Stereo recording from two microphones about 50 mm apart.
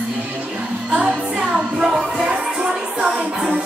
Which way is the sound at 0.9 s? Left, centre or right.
Centre.